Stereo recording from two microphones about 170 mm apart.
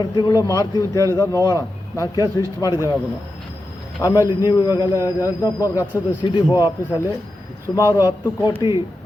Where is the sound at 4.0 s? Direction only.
25° left (ahead or behind).